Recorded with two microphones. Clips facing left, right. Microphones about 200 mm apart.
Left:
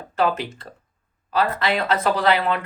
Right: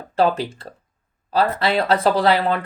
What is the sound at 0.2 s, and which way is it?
Speech, 35° right (ahead or behind).